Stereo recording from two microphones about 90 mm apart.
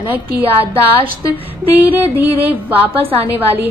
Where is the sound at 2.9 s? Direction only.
90° right.